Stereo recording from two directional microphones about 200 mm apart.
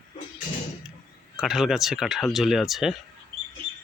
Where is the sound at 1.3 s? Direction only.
Centre (ahead or behind).